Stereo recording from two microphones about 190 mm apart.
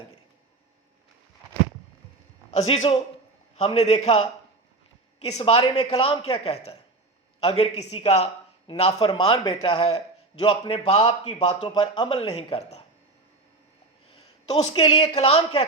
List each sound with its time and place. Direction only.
2.6 s a man's voice: 35° left (ahead or behind)
14.4 s speech: 35° left (ahead or behind)